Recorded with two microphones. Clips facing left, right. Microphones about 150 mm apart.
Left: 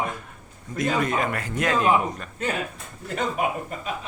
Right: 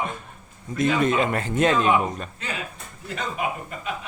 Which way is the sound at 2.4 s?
50° left (ahead or behind).